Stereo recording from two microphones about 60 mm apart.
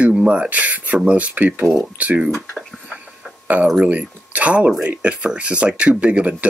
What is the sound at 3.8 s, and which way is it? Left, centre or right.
Speech, right.